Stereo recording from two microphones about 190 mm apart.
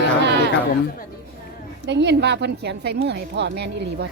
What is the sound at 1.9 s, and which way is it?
A woman's voice, 65° right (ahead or behind).